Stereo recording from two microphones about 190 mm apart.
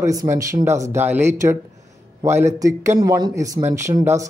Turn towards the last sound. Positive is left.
turn(degrees=-15)  # may be behind; listen again after turning